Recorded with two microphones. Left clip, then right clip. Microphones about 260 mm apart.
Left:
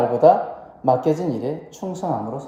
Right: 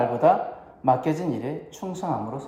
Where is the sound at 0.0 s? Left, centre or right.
Right.